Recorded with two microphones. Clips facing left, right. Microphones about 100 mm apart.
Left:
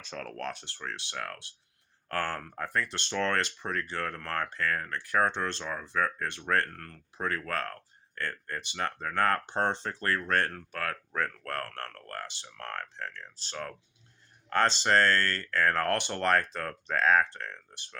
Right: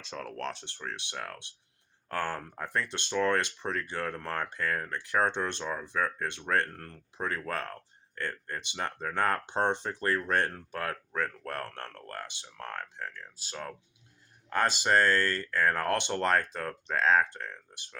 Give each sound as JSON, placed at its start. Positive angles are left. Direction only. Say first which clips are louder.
{"t": 0.0, "sound": "speech", "louder": "even", "side_deg": -15}
{"t": 0.3, "sound": "speech", "louder": "even", "side_deg": -25}